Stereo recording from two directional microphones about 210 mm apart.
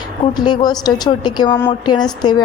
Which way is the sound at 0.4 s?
20° left (ahead or behind).